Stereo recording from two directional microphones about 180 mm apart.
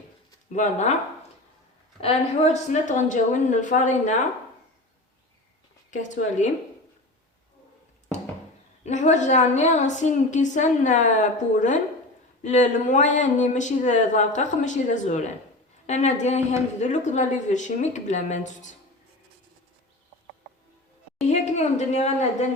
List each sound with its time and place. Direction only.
0.5 s a woman's voice: 40° left (ahead or behind)
2.0 s speech: 35° left (ahead or behind)
5.9 s speech: 45° left (ahead or behind)
8.8 s a woman's voice: 40° left (ahead or behind)
21.2 s a woman's voice: 40° left (ahead or behind)